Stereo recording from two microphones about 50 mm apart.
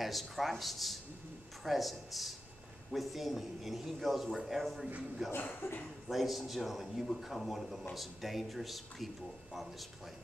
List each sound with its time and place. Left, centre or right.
0.0 s speech: centre
5.6 s a man's voice: left
6.0 s speech: centre